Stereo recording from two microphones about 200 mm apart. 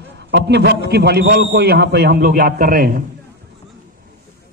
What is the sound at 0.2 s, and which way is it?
A man's voice, 60° right (ahead or behind).